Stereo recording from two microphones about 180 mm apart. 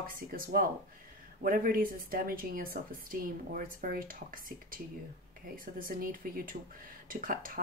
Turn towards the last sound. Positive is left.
turn(degrees=-50)  # may be behind; listen again after turning